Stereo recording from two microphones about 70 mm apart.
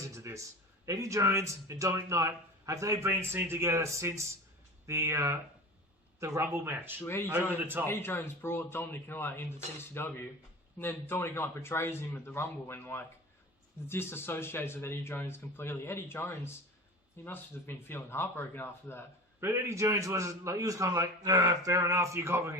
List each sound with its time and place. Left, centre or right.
0.2 s speech: right
7.0 s speech: left
19.4 s speech: right